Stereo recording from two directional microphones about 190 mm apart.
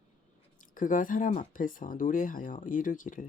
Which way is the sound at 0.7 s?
45° left (ahead or behind).